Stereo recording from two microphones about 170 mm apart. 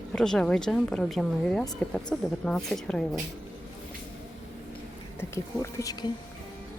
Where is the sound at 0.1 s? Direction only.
5° left (ahead or behind).